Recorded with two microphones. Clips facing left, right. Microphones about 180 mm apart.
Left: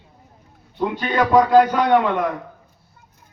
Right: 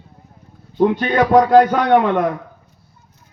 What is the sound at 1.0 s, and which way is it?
Speech, 50° right (ahead or behind).